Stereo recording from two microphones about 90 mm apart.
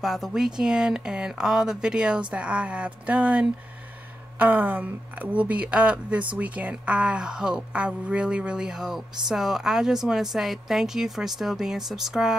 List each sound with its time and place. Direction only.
0.0 s a woman's voice: centre (ahead or behind)